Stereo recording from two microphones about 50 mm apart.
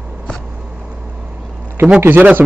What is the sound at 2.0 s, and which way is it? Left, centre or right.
Speech, right.